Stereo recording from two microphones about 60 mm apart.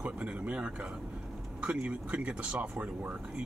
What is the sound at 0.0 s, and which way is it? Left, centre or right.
Speech, right.